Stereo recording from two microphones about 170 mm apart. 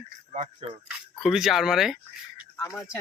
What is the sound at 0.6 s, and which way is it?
Speech, 35° right (ahead or behind).